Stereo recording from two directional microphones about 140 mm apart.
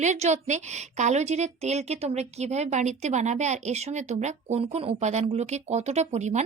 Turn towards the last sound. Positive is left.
turn(degrees=-55)  # may be behind; listen again after turning